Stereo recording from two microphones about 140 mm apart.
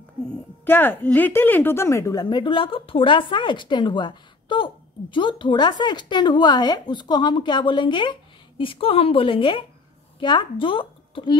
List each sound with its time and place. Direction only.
0.7 s a woman's voice: 15° left (ahead or behind)
2.2 s speech: 35° left (ahead or behind)